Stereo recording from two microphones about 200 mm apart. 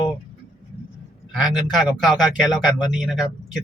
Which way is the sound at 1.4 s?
Centre (ahead or behind).